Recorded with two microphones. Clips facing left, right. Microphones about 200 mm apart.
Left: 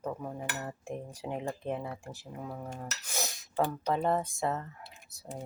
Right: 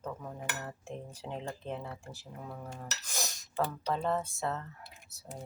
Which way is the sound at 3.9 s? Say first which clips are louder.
Left 3 dB; 15° left (ahead or behind).